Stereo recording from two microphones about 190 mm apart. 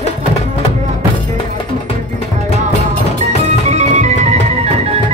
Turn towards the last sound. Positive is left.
turn(degrees=-35)  # may be behind; listen again after turning